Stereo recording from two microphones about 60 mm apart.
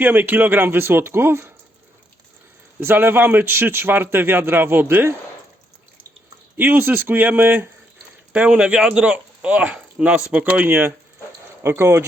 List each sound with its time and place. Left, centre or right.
0.0 s a man's voice: right
2.8 s a man's voice: right
6.6 s a man's voice: right
8.3 s speech: right
11.6 s speech: right